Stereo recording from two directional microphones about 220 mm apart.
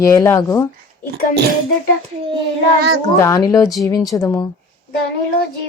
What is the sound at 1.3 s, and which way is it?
Speech, 45° right (ahead or behind).